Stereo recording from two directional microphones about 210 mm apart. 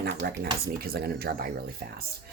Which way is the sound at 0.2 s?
50° right (ahead or behind).